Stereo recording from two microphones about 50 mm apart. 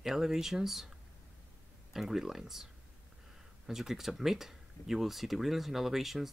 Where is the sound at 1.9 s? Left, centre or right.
Centre.